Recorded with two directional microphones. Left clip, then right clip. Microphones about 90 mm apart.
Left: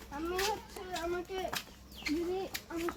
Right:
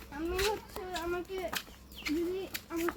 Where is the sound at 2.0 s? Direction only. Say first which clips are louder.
Right 1 dB; 55° right (ahead or behind).